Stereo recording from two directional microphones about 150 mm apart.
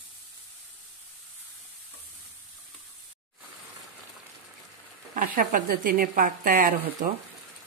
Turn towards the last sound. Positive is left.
turn(degrees=-60)  # may be behind; listen again after turning